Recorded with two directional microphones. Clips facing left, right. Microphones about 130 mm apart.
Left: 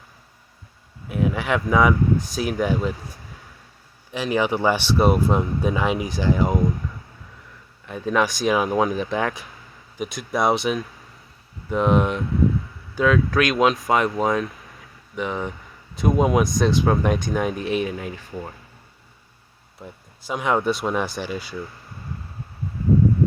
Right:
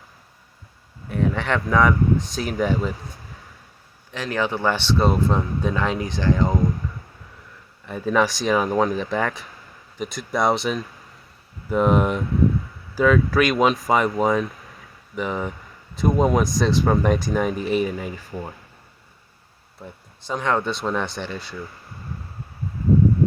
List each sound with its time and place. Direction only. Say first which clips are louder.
1.0 s speech: even; 5° left (ahead or behind)
4.1 s speech: left 3 dB; 15° left (ahead or behind)
7.9 s speech: right 1 dB; centre (ahead or behind)
19.8 s speech: even; 5° left (ahead or behind)